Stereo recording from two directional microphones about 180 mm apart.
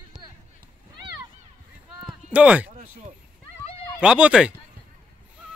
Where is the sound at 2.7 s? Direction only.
40° right (ahead or behind).